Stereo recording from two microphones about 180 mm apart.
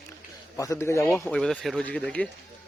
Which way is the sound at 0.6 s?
15° left (ahead or behind).